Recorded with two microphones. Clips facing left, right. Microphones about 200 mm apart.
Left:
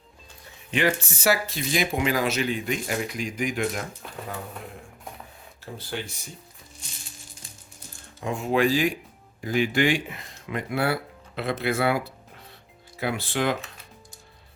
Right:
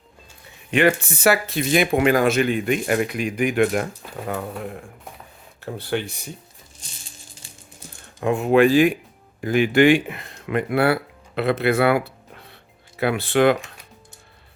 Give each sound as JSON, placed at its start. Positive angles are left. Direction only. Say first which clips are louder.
{"t": 0.7, "sound": "speech", "louder": "right 6 dB", "side_deg": -60}
{"t": 4.0, "sound": "speech", "louder": "right 4 dB", "side_deg": -5}
{"t": 5.7, "sound": "speech", "louder": "right 8 dB", "side_deg": -60}
{"t": 8.2, "sound": "speech", "louder": "right 7 dB", "side_deg": -60}